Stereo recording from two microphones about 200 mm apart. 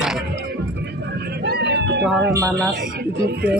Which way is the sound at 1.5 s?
55° right (ahead or behind).